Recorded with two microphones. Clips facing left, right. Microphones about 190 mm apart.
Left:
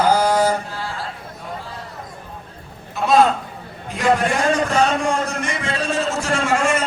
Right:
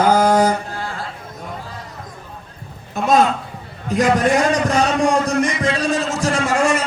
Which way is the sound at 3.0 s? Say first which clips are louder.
Even; 45° right (ahead or behind).